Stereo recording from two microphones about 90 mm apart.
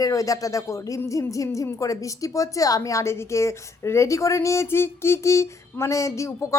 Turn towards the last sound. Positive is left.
turn(degrees=35)  # may be behind; listen again after turning